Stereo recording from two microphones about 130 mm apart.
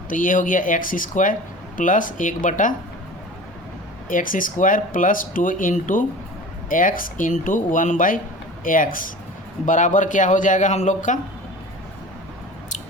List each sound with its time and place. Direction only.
0.1 s speech: 90° left
4.1 s speech: 90° left
9.6 s a man's voice: 80° left